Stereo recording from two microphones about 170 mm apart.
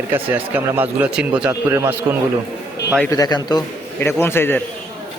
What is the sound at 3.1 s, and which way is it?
Speech, 25° left (ahead or behind).